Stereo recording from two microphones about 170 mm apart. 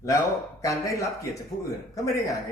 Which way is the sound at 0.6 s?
20° left (ahead or behind).